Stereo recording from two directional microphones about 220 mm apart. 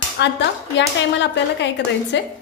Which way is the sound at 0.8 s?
50° left (ahead or behind).